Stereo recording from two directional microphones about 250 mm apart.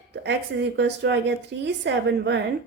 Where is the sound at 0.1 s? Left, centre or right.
Right.